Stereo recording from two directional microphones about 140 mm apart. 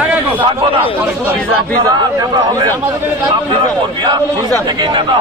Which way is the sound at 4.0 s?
30° right (ahead or behind).